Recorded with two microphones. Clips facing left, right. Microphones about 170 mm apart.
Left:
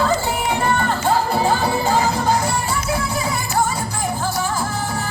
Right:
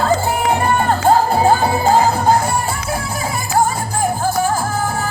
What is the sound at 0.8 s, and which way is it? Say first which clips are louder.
Music: right 5 dB; 45° right (ahead or behind).